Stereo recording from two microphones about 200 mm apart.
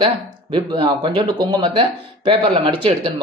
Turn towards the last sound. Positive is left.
turn(degrees=-25)  # may be behind; listen again after turning